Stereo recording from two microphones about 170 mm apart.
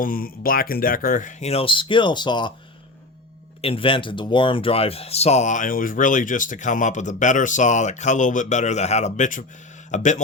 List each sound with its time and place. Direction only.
0.0 s speech: 55° left (ahead or behind); by 2.5 s 25° left (ahead or behind)
3.6 s speech: 35° left (ahead or behind)